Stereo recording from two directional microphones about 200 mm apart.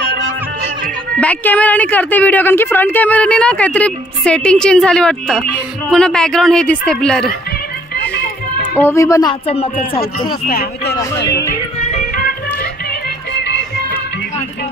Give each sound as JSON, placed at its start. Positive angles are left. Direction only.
{"t": 1.2, "sound": "a woman's voice", "side_deg": 5}
{"t": 8.7, "sound": "a woman's voice", "side_deg": 10}
{"t": 10.5, "sound": "speech", "side_deg": 50}
{"t": 11.8, "sound": "music", "side_deg": 40}
{"t": 13.3, "sound": "music", "side_deg": 60}